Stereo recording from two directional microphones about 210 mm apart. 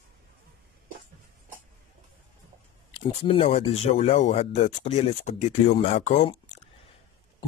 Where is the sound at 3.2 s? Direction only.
25° left (ahead or behind).